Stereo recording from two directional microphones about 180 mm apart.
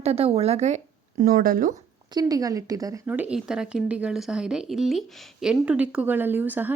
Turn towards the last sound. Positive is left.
turn(degrees=-10)  # may be behind; listen again after turning